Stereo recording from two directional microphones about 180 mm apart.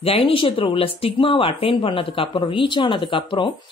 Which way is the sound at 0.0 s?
30° left (ahead or behind).